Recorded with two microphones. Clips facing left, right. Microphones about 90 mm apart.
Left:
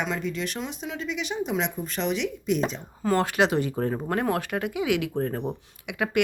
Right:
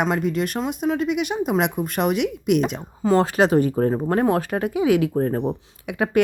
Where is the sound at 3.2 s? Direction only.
35° right (ahead or behind).